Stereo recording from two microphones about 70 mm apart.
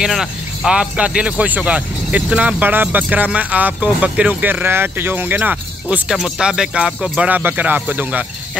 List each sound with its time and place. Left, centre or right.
0.0 s speech: centre
6.0 s speech: centre; by 8.3 s right